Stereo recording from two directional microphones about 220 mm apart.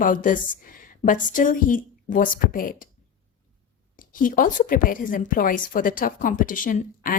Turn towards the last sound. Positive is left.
turn(degrees=35)  # may be behind; listen again after turning